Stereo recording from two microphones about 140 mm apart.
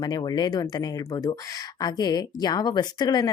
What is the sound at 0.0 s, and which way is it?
Speech, 30° left (ahead or behind).